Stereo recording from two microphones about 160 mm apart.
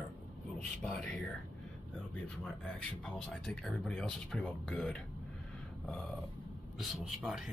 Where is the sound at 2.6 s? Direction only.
5° left (ahead or behind).